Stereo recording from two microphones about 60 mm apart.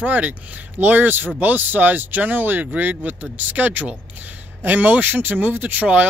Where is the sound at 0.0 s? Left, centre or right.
Right.